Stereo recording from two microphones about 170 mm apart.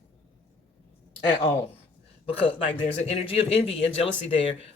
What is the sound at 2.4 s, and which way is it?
Speech, 35° left (ahead or behind).